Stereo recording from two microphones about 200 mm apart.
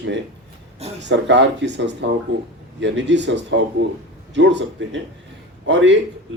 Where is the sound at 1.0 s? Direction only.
65° right (ahead or behind).